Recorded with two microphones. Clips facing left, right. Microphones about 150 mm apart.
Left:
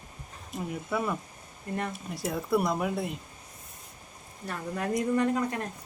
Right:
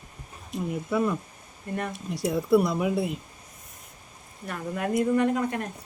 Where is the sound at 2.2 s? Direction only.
Centre (ahead or behind).